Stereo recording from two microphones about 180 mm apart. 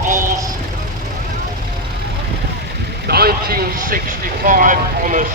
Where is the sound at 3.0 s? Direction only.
60° right (ahead or behind).